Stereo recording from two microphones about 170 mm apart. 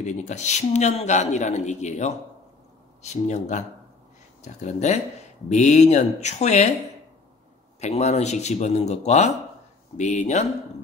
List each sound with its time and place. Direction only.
0.0 s a man's voice: 45° left (ahead or behind)
7.8 s a man's voice: 40° left (ahead or behind)